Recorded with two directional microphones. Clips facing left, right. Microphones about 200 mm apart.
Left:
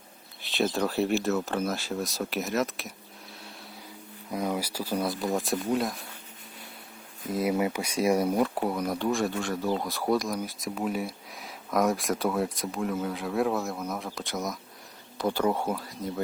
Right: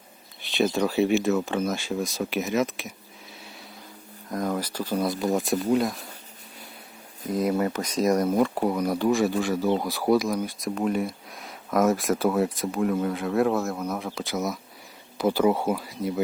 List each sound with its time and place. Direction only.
0.4 s speech: centre (ahead or behind)
4.3 s speech: 5° left (ahead or behind)
7.3 s speech: 5° left (ahead or behind)